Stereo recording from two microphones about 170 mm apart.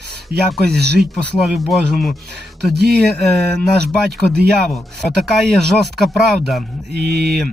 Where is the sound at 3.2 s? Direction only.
Centre (ahead or behind).